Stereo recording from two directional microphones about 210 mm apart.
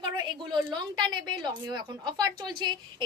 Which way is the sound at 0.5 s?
20° right (ahead or behind).